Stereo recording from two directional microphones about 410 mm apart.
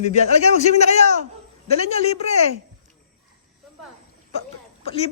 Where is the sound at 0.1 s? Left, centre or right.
Centre.